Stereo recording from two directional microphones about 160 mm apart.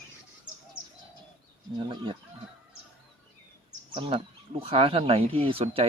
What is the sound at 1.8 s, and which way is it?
Speech, 35° right (ahead or behind).